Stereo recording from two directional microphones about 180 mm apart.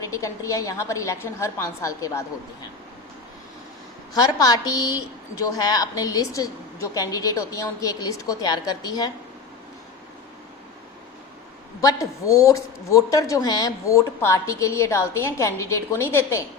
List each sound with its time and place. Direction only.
0.0 s speech: 20° left (ahead or behind)
4.1 s a woman's voice: 20° left (ahead or behind)
11.8 s speech: 20° left (ahead or behind)